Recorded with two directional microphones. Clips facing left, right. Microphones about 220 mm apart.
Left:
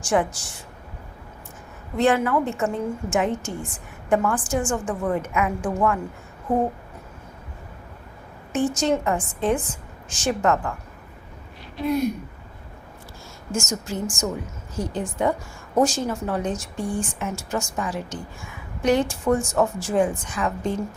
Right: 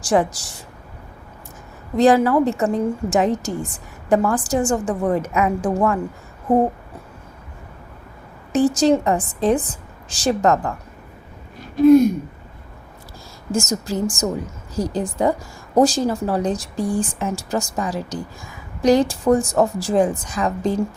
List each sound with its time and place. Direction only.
0.0 s a woman's voice: 35° right (ahead or behind)
2.0 s a woman's voice: 35° right (ahead or behind)
8.5 s a woman's voice: 35° right (ahead or behind)
11.6 s a sound: 45° right (ahead or behind)
13.5 s a woman's voice: 35° right (ahead or behind)